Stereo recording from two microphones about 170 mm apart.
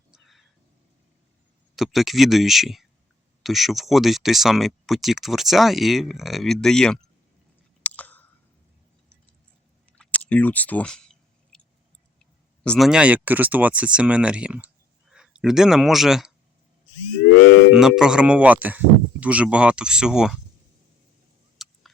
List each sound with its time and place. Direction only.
0.1 s cat: centre (ahead or behind)
1.7 s speech: centre (ahead or behind)
7.9 s chewing: 10° left (ahead or behind)
10.0 s clicking: 5° left (ahead or behind)
12.2 s speech: 5° left (ahead or behind)
17.2 s a sound: 60° left (ahead or behind)
17.7 s speech: 5° right (ahead or behind)
21.6 s a sound: centre (ahead or behind)